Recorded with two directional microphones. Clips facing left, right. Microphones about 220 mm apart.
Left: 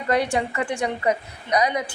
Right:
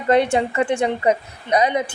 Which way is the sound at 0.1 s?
25° right (ahead or behind).